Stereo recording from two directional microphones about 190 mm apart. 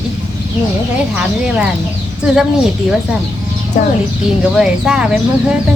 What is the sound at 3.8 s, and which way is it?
Speech, 45° left (ahead or behind).